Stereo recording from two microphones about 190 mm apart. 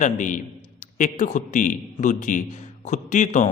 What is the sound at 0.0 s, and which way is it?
A man's voice, 40° left (ahead or behind).